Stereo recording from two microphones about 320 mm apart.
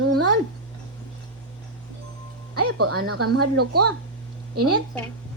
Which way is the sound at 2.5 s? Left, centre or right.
Right.